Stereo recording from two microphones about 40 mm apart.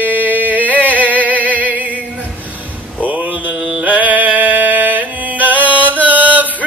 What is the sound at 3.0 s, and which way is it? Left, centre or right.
Mantra, right.